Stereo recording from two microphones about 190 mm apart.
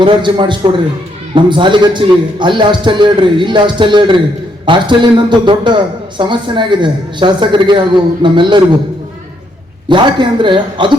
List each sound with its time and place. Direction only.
0.0 s a man's voice: 25° right (ahead or behind)
9.9 s a man's voice: 25° right (ahead or behind)